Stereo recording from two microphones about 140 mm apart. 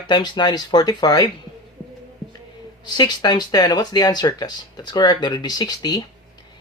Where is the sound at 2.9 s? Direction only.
30° left (ahead or behind).